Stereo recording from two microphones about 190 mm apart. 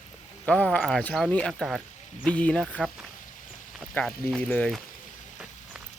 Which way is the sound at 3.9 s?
5° left (ahead or behind).